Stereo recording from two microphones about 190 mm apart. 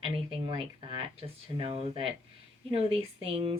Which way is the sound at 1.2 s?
30° right (ahead or behind).